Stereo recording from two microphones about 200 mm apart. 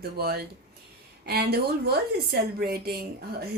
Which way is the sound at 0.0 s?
50° right (ahead or behind).